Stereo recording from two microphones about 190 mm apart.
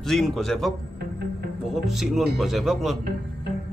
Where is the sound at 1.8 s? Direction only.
Centre (ahead or behind).